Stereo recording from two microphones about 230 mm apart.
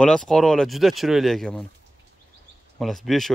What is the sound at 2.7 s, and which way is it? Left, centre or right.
Speech, centre.